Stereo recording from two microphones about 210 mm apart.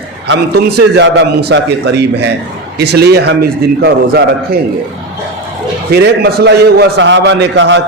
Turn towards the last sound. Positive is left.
turn(degrees=-55)  # may be behind; listen again after turning